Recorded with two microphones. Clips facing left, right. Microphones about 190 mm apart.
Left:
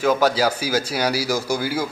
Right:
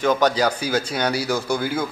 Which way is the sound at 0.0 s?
5° left (ahead or behind).